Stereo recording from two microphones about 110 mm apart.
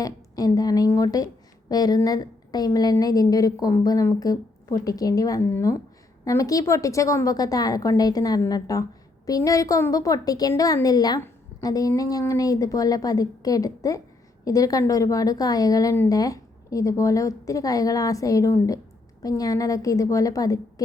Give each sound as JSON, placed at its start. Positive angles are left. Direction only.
{"t": 0.0, "sound": "a woman's voice", "side_deg": 35}